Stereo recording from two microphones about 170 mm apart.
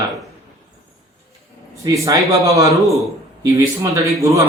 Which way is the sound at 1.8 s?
20° right (ahead or behind).